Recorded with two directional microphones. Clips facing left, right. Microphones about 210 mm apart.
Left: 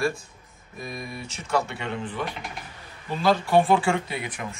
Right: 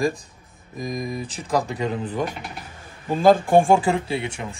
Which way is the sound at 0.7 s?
90° right.